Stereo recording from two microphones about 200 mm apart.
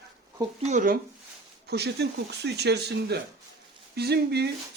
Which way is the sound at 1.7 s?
55° right (ahead or behind).